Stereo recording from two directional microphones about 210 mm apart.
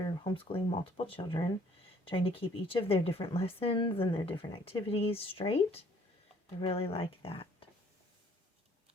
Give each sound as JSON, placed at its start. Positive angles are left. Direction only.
{"t": 0.0, "sound": "speech", "side_deg": 25}